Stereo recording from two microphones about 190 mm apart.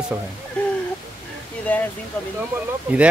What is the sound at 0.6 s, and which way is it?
Speech, 5° left (ahead or behind).